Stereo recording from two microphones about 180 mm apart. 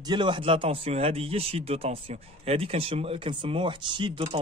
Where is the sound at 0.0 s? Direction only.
25° right (ahead or behind).